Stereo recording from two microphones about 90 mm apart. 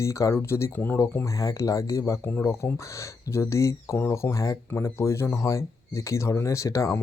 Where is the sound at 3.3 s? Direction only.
30° left (ahead or behind).